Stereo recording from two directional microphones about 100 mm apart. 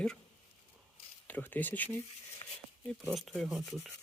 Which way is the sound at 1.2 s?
15° left (ahead or behind).